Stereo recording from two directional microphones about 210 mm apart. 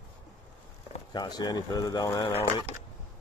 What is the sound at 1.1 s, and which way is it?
Speech, 20° left (ahead or behind).